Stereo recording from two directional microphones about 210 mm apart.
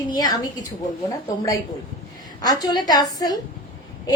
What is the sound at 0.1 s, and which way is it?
A woman's voice, 20° left (ahead or behind).